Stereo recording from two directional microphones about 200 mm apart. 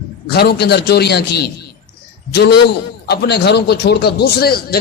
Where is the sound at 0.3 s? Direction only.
55° left (ahead or behind).